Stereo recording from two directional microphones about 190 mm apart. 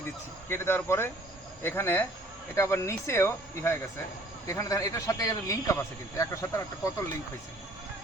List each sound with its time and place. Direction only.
0.4 s a man's voice: 15° left (ahead or behind)